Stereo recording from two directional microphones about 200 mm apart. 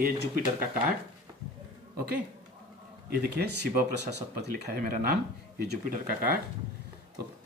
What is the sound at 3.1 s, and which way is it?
Speech, 50° right (ahead or behind).